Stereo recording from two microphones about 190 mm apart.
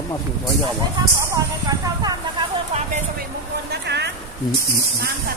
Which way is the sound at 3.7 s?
60° right (ahead or behind).